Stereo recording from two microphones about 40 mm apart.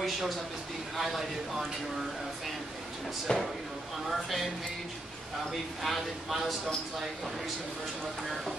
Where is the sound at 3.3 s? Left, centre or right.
Centre.